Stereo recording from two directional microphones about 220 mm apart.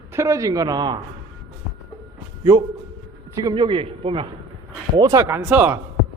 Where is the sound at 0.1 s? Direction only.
15° right (ahead or behind).